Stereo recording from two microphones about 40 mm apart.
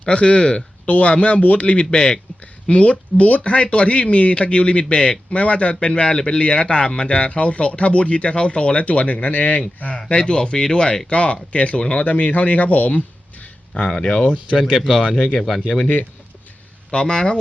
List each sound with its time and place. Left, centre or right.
0.0 s speech: left
0.9 s speech: left
10.1 s speech: left
12.0 s speech: left
14.6 s speech: centre
15.1 s speech: left
15.5 s speech: centre
16.9 s speech: left